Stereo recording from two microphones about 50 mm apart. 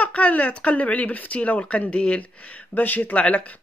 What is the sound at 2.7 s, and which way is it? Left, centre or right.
Speech, left.